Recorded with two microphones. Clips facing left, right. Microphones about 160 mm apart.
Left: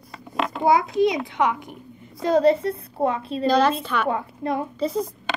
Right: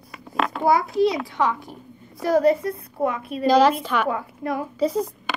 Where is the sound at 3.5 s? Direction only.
10° right (ahead or behind).